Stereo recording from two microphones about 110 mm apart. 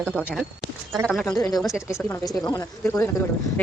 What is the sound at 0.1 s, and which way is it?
Speech, 10° right (ahead or behind).